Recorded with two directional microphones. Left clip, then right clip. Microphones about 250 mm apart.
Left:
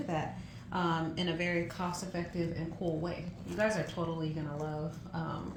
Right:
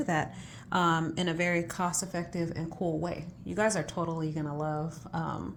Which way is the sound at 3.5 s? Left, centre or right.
Right.